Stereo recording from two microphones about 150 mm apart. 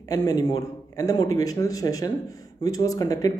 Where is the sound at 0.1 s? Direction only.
25° left (ahead or behind).